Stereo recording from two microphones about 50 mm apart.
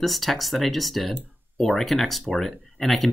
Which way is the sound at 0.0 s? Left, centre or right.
Centre.